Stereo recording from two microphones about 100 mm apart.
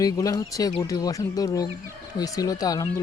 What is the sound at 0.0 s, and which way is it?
Speech, 35° left (ahead or behind).